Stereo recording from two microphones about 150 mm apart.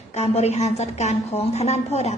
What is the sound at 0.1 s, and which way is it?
A woman's voice, 45° left (ahead or behind).